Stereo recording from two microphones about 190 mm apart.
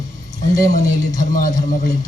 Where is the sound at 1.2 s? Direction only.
45° left (ahead or behind).